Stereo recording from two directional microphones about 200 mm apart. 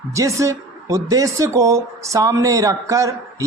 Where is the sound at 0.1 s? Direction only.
15° right (ahead or behind).